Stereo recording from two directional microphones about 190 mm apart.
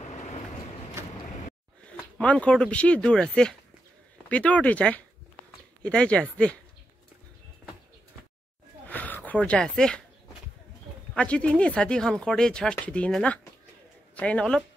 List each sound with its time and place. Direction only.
0.0 s vehicle: 35° left (ahead or behind)
2.1 s speech: 5° left (ahead or behind)
8.8 s a sound: 10° left (ahead or behind)
11.1 s speech: 5° left (ahead or behind)